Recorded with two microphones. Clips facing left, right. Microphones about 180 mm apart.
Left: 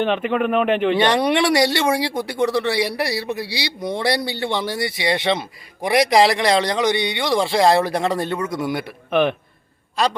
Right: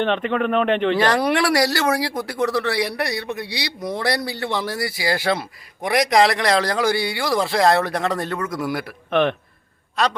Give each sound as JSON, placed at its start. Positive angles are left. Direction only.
{"t": 0.0, "sound": "a man's voice", "side_deg": 5}
{"t": 1.3, "sound": "speech", "side_deg": 25}
{"t": 2.0, "sound": "a man's voice", "side_deg": 0}